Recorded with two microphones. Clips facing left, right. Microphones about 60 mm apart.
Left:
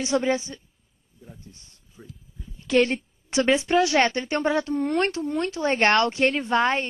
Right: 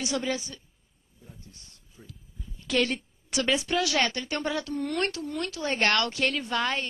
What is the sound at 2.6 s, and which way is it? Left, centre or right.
A woman's voice, left.